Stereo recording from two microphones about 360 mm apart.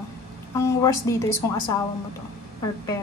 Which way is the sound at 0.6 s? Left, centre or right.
Centre.